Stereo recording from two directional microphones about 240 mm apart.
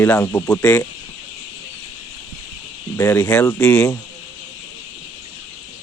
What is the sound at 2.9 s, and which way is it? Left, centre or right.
Speech, centre.